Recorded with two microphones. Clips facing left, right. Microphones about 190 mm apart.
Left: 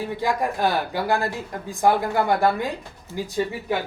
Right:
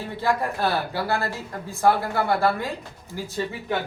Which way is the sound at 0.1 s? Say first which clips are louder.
Right 2 dB; 15° left (ahead or behind).